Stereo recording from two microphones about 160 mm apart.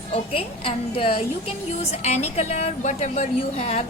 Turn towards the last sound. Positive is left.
turn(degrees=40)  # may be behind; listen again after turning